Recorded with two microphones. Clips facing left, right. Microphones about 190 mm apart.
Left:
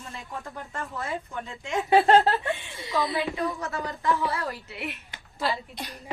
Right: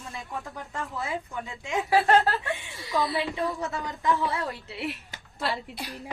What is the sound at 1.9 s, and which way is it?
A woman's voice, 20° left (ahead or behind).